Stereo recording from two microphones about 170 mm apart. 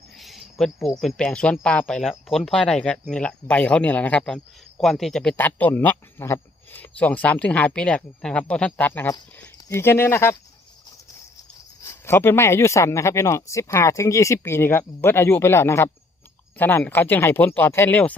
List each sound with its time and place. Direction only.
0.2 s cricket: centre (ahead or behind)
0.6 s speech: centre (ahead or behind)
11.8 s speech: 15° left (ahead or behind)